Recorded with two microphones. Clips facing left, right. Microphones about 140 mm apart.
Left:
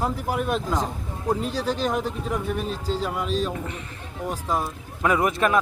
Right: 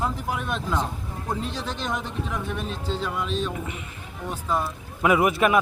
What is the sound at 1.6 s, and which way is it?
Speech, 35° left (ahead or behind).